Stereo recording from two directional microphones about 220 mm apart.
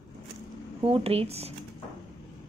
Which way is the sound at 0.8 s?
25° right (ahead or behind).